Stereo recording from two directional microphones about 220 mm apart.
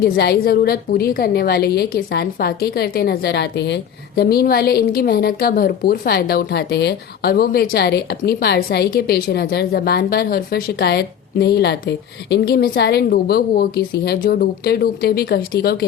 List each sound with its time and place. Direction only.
0.0 s a woman's voice: 45° left (ahead or behind)